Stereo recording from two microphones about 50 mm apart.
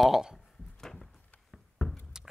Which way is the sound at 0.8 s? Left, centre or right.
Centre.